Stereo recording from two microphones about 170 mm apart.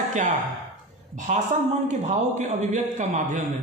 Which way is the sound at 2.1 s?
40° right (ahead or behind).